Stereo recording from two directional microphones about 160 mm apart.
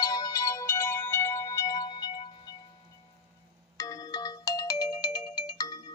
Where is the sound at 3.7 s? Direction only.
20° left (ahead or behind).